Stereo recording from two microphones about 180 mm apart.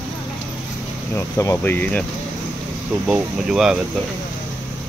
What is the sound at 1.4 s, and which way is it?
Speech, 15° left (ahead or behind).